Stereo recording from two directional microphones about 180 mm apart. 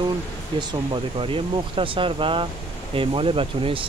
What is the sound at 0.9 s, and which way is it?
Speech, 30° right (ahead or behind).